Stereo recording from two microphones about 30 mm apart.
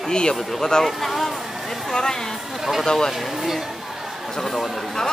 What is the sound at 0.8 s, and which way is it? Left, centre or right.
Speech, centre.